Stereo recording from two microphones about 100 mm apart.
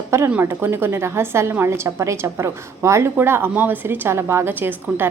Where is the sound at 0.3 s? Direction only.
20° right (ahead or behind).